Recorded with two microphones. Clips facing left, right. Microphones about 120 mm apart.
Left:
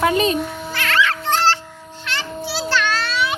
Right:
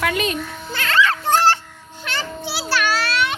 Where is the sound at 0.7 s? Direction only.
25° right (ahead or behind).